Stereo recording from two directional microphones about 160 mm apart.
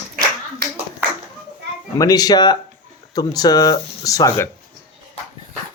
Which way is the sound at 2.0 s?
25° left (ahead or behind).